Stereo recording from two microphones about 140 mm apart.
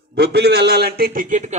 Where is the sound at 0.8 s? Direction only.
85° right; by 1.6 s 60° right (ahead or behind).